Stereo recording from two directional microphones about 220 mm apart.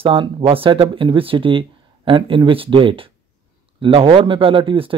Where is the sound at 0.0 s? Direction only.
25° right (ahead or behind).